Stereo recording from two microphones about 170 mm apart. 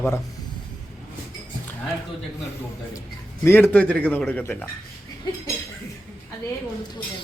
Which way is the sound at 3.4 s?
10° left (ahead or behind).